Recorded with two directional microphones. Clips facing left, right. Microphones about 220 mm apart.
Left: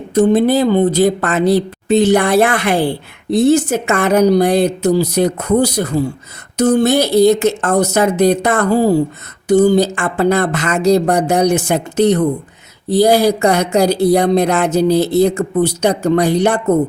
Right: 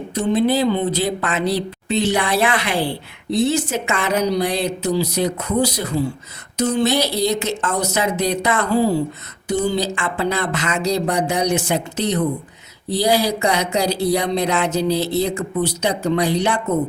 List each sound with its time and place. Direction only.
0.1 s a woman's voice: 50° left (ahead or behind)